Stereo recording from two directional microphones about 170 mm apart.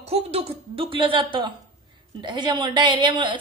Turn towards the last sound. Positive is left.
turn(degrees=-25)  # may be behind; listen again after turning